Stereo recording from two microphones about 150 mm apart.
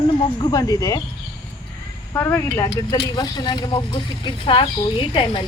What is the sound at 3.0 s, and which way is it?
Speech, 30° left (ahead or behind).